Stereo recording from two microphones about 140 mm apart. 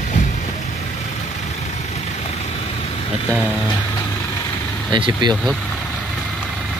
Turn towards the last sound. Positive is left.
turn(degrees=-35)  # may be behind; listen again after turning